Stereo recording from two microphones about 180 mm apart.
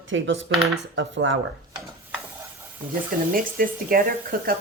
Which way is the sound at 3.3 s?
50° right (ahead or behind).